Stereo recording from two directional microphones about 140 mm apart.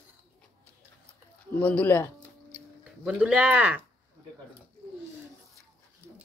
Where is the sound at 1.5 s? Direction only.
10° left (ahead or behind).